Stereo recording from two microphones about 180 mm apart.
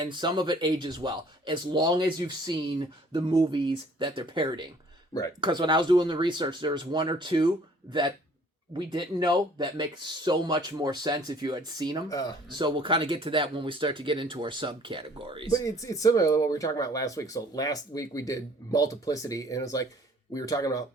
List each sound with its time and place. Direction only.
0.0 s speech: 25° right (ahead or behind)
12.0 s speech: 20° left (ahead or behind)
12.5 s speech: 25° right (ahead or behind)
15.5 s speech: 20° left (ahead or behind)